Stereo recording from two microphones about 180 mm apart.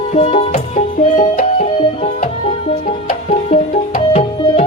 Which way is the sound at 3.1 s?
45° left (ahead or behind).